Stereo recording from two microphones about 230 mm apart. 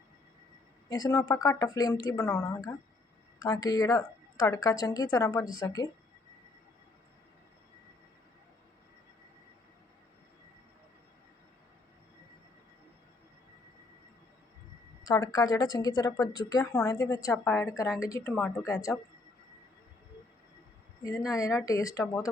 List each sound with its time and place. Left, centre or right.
0.9 s a woman's voice: centre
15.0 s a woman's voice: centre
21.0 s a woman's voice: centre